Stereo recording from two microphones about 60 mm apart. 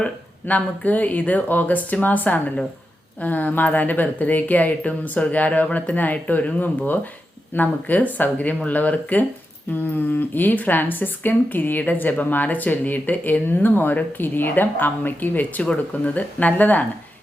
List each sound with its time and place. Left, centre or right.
0.0 s speech: left